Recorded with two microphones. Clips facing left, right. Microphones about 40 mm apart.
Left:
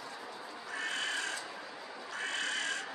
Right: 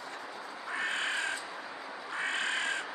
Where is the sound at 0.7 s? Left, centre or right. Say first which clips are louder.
Right 3 dB; right.